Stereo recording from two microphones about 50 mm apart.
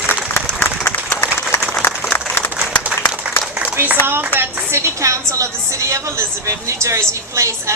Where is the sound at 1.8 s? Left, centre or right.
Left.